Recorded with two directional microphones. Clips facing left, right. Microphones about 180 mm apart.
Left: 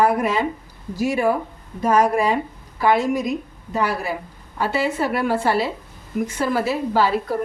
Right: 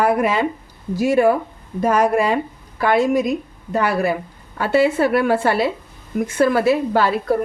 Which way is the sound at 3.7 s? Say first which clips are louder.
Right 4 dB; 55° right (ahead or behind).